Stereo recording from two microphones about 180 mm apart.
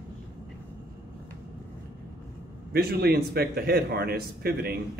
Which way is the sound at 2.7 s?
60° right (ahead or behind).